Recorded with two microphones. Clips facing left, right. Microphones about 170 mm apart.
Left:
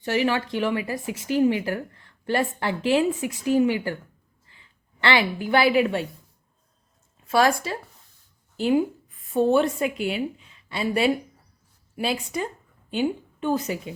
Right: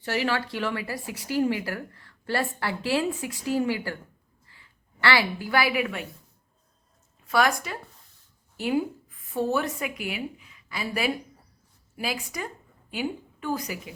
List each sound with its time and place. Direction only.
0.0 s a woman's voice: 20° left (ahead or behind)
7.3 s a woman's voice: 25° left (ahead or behind)